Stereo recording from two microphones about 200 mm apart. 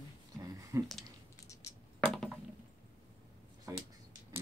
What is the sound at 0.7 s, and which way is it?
Speech, 15° right (ahead or behind).